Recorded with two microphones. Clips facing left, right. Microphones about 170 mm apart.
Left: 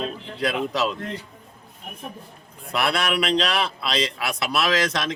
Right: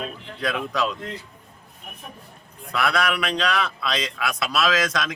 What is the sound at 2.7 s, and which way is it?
Speech, 30° left (ahead or behind).